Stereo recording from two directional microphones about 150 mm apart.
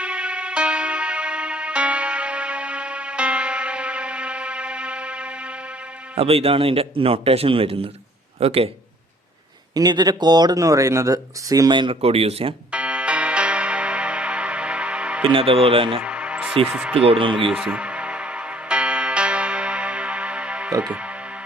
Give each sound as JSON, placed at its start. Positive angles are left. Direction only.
{"t": 0.0, "sound": "music", "side_deg": -10}
{"t": 6.1, "sound": "a man's voice", "side_deg": -40}
{"t": 9.7, "sound": "speech", "side_deg": -30}
{"t": 12.7, "sound": "music", "side_deg": -10}
{"t": 15.3, "sound": "a man's voice", "side_deg": -40}
{"t": 16.0, "sound": "music", "side_deg": -10}
{"t": 16.6, "sound": "speech", "side_deg": -5}
{"t": 17.1, "sound": "a man's voice", "side_deg": -35}
{"t": 17.5, "sound": "music", "side_deg": -5}
{"t": 20.8, "sound": "speech", "side_deg": -10}